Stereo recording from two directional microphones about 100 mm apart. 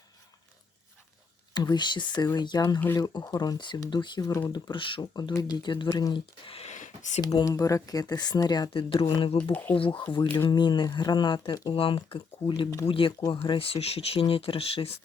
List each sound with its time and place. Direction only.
1.5 s speech: 45° left (ahead or behind)
4.3 s speech: 30° left (ahead or behind)
4.5 s speech: 55° left (ahead or behind)
5.3 s speech: 40° left (ahead or behind); by 6.7 s 65° left (ahead or behind)
7.2 s speech: 45° left (ahead or behind)
7.4 s speech: 35° left (ahead or behind)
9.0 s speech: 60° left (ahead or behind)
9.4 s speech: 15° left (ahead or behind)
9.7 s speech: 60° left (ahead or behind)
10.2 s speech: 45° left (ahead or behind)
11.7 s speech: 60° left (ahead or behind)